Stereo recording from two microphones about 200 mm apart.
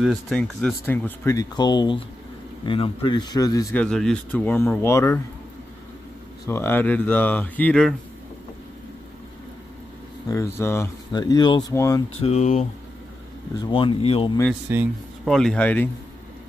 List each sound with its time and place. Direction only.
0.0 s a man's voice: centre (ahead or behind); by 3.6 s 20° left (ahead or behind)
3.7 s speech: 5° left (ahead or behind)
6.4 s speech: 10° left (ahead or behind)
10.2 s speech: 15° left (ahead or behind)
12.2 s speech: 35° left (ahead or behind)
13.6 s a man's voice: 25° left (ahead or behind)
14.7 s speech: 10° right (ahead or behind)
15.2 s speech: centre (ahead or behind)